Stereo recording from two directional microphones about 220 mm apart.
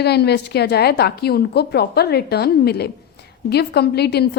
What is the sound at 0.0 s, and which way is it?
A woman's voice, 50° left (ahead or behind).